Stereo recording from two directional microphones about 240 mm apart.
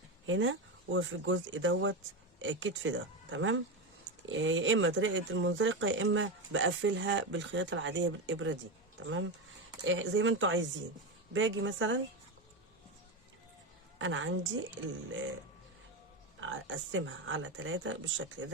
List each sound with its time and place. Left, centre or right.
0.3 s speech: right
14.0 s a woman's voice: right
16.4 s speech: right